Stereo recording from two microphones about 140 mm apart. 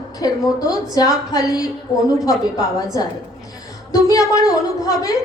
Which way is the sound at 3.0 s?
25° left (ahead or behind).